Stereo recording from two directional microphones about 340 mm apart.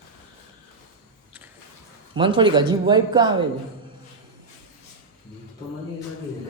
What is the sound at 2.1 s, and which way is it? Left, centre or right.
Speech, centre.